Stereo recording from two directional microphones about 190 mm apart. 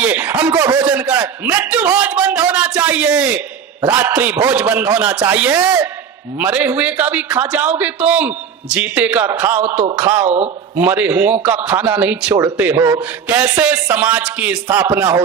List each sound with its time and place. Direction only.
0.0 s a man's voice: 10° right (ahead or behind)
10.2 s speech: 35° right (ahead or behind)
10.8 s a man's voice: 10° right (ahead or behind)
12.3 s a man's voice: 20° right (ahead or behind)